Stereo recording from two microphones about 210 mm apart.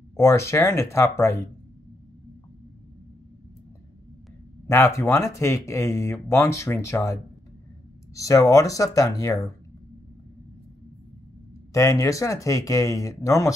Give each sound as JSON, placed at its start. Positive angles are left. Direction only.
{"t": 0.1, "sound": "speech", "side_deg": 15}
{"t": 4.6, "sound": "speech", "side_deg": 15}
{"t": 11.7, "sound": "speech", "side_deg": 15}